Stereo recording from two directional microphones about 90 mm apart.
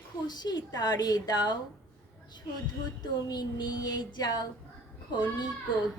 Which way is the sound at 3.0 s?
50° left (ahead or behind).